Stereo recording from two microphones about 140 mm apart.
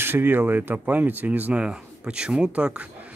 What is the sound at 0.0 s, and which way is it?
Speech, 15° right (ahead or behind).